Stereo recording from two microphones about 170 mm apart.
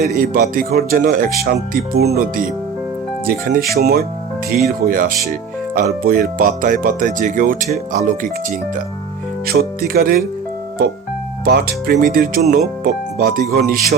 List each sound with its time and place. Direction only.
0.0 s speech: 60° right (ahead or behind)
9.5 s speech: 60° right (ahead or behind)
11.4 s speech: 65° right (ahead or behind)